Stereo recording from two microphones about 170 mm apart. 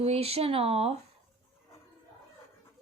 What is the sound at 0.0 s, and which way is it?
Speech, 35° right (ahead or behind).